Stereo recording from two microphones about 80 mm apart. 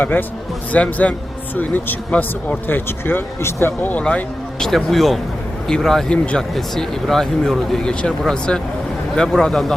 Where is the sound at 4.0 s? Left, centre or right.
Centre.